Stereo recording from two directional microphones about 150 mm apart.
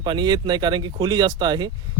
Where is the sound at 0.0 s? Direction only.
30° right (ahead or behind).